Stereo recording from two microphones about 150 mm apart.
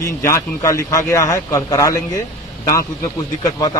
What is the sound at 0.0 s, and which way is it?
A man's voice, 20° left (ahead or behind).